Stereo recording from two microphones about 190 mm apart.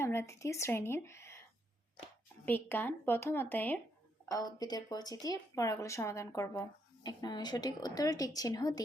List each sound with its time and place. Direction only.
0.0 s speech: 15° left (ahead or behind)